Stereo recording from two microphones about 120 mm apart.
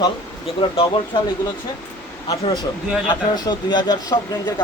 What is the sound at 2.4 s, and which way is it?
Speech, 35° left (ahead or behind).